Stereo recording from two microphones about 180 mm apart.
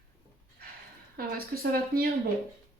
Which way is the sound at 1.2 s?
55° right (ahead or behind).